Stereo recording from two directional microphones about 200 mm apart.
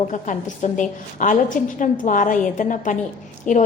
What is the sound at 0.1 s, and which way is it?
A woman's voice, 40° left (ahead or behind).